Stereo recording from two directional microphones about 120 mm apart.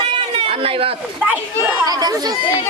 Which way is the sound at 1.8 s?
35° right (ahead or behind).